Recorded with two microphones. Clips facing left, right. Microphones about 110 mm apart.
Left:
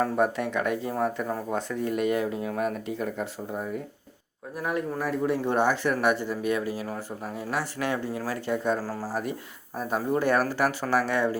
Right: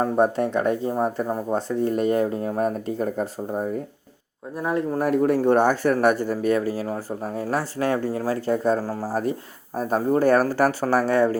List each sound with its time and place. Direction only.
0.0 s speech: 35° right (ahead or behind)
4.9 s speech: 55° right (ahead or behind); by 8.8 s 35° right (ahead or behind)
8.8 s speech: 25° right (ahead or behind)
9.7 s speech: 40° right (ahead or behind)